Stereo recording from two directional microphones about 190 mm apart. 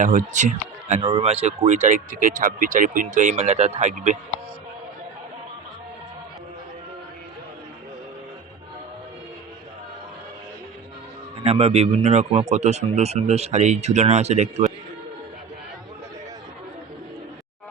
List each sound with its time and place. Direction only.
0.0 s speech: 45° right (ahead or behind)
11.3 s speech: 30° right (ahead or behind)